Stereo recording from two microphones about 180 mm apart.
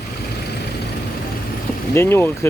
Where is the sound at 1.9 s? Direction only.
15° left (ahead or behind).